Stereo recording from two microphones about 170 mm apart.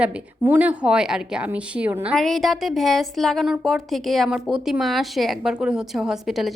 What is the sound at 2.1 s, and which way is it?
A woman's voice, centre (ahead or behind).